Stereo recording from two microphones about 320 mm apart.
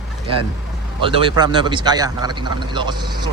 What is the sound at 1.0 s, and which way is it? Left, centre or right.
A man's voice, centre.